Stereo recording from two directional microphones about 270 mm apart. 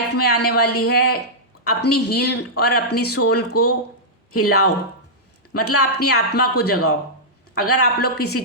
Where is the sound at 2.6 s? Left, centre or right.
Left.